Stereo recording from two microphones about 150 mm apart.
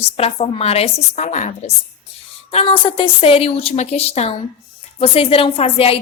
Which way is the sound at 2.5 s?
35° left (ahead or behind).